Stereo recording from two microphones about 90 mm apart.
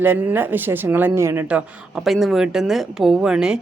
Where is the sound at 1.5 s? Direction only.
5° right (ahead or behind).